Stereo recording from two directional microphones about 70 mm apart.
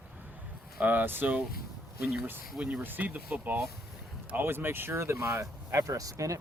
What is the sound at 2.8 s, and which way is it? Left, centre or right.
Speech, right.